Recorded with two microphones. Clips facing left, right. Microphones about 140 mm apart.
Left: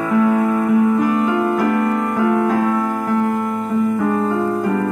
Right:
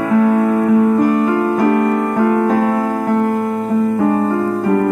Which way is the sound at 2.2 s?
50° right (ahead or behind).